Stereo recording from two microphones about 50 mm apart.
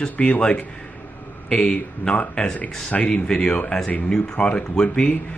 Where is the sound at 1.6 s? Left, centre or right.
Left.